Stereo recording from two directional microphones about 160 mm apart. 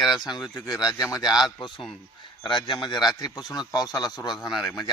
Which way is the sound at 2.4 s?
30° left (ahead or behind).